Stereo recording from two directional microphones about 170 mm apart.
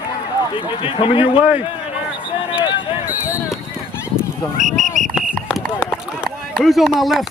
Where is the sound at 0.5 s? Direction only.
30° left (ahead or behind).